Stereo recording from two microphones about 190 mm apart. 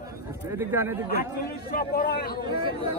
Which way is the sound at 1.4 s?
50° left (ahead or behind).